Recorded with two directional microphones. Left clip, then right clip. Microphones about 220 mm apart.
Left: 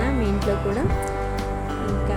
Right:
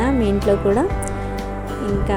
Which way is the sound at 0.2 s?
Centre (ahead or behind).